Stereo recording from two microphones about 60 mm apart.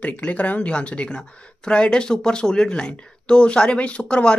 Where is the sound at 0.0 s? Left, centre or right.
Left.